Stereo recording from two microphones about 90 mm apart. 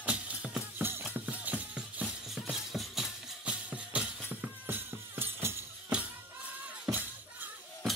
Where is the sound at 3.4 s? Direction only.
15° right (ahead or behind).